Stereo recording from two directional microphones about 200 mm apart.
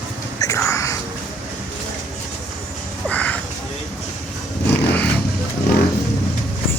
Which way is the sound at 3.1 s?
5° left (ahead or behind).